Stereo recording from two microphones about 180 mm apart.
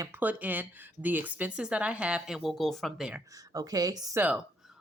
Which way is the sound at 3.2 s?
20° right (ahead or behind).